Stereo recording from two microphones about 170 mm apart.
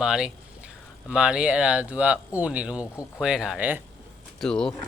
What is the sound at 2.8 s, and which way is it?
Speech, 20° left (ahead or behind).